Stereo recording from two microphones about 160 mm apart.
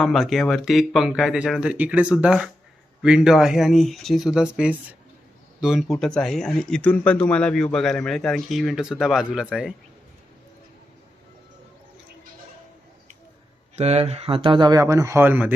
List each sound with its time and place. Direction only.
0.0 s speech: centre (ahead or behind)
13.7 s speech: 40° right (ahead or behind); by 15.5 s 10° right (ahead or behind)